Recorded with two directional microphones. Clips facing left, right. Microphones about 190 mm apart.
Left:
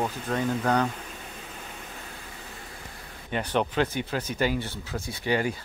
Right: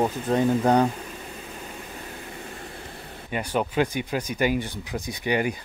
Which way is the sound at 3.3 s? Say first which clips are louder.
Even; 10° right (ahead or behind).